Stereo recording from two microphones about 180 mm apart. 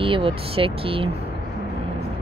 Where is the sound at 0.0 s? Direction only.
30° right (ahead or behind).